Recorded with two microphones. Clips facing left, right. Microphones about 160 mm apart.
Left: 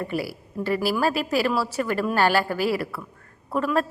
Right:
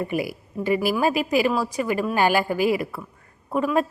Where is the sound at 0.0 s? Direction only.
15° right (ahead or behind).